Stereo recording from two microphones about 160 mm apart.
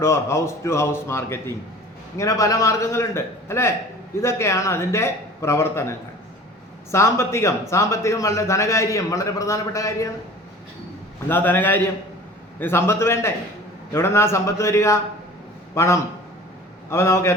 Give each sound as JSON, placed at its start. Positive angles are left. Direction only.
{"t": 0.0, "sound": "a man's voice", "side_deg": 15}
{"t": 6.9, "sound": "a man's voice", "side_deg": 15}
{"t": 11.3, "sound": "a man's voice", "side_deg": 15}